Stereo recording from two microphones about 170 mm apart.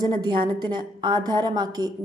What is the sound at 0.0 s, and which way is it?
A woman's voice, 25° right (ahead or behind).